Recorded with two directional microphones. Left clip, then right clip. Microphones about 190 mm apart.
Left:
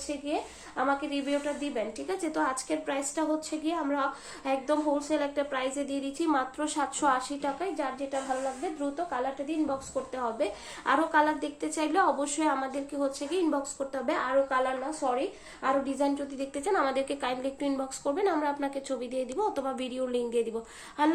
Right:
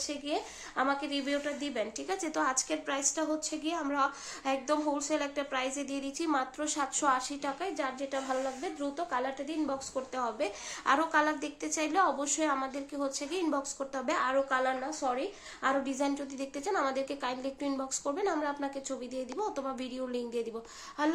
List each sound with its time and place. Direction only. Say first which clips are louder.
0.8 s a woman's voice: left 2 dB; 30° right (ahead or behind); by 7.5 s centre (ahead or behind)
7.6 s a woman's voice: left 2 dB; 20° right (ahead or behind)